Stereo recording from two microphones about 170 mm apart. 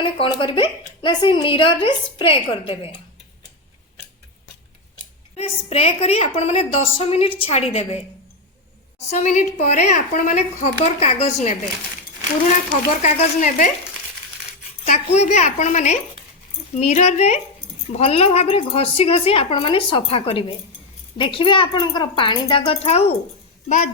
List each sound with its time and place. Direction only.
0.0 s a woman's voice: 30° left (ahead or behind)
5.4 s a woman's voice: 35° left (ahead or behind)
9.0 s a woman's voice: 40° left (ahead or behind)
13.0 s a woman's voice: 45° left (ahead or behind)
14.8 s a woman's voice: 40° left (ahead or behind)
23.6 s a child's voice: 50° left (ahead or behind)